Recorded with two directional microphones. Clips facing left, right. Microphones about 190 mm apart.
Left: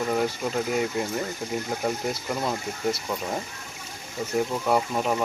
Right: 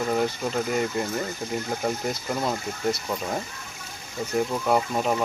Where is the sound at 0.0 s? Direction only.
Centre (ahead or behind).